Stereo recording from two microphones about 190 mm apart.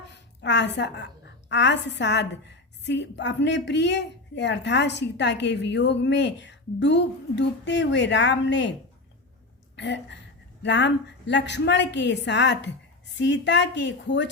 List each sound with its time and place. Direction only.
0.4 s a woman's voice: 65° left (ahead or behind)
9.7 s a woman's voice: 65° left (ahead or behind)